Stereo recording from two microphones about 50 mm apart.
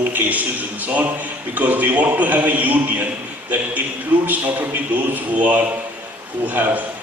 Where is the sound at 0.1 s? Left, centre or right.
Right.